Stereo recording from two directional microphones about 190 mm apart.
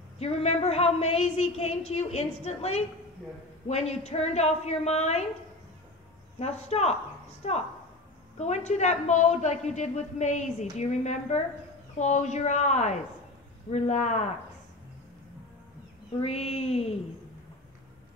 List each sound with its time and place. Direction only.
0.2 s a man's voice: 35° left (ahead or behind)
6.4 s a man's voice: 35° left (ahead or behind)
16.2 s a man's voice: 35° left (ahead or behind)